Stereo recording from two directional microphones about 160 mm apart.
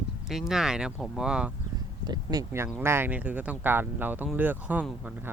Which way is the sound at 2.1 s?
20° right (ahead or behind).